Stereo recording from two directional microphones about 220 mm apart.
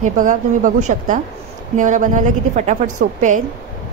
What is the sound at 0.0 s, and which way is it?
A woman's voice, 35° right (ahead or behind).